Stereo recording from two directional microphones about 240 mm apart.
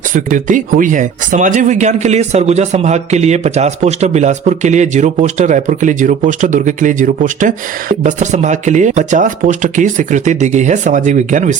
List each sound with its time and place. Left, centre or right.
0.1 s speech: right